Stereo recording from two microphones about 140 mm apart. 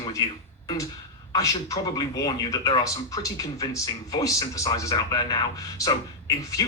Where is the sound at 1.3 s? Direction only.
25° left (ahead or behind).